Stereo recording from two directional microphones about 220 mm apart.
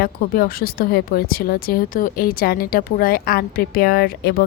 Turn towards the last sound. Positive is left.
turn(degrees=45)  # may be behind; listen again after turning